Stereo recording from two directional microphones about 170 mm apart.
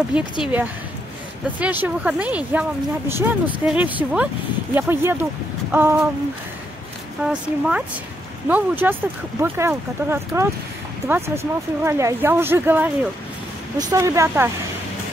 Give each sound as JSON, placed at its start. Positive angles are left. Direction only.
{"t": 0.1, "sound": "speech", "side_deg": -10}
{"t": 7.2, "sound": "speech", "side_deg": -5}